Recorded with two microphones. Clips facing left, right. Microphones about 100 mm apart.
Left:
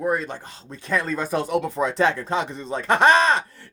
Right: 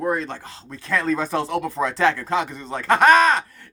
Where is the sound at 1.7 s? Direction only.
20° left (ahead or behind).